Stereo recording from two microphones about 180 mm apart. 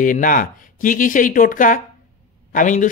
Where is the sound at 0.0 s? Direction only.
50° left (ahead or behind).